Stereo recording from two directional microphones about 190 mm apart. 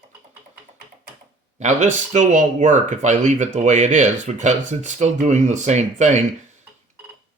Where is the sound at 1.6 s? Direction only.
40° right (ahead or behind).